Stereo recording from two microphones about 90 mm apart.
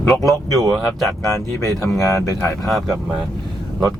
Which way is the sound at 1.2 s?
35° left (ahead or behind).